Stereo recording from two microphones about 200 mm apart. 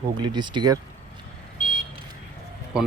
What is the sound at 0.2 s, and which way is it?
Speech, 20° right (ahead or behind).